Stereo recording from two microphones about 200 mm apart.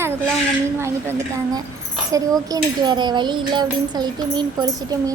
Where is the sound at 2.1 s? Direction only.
15° right (ahead or behind).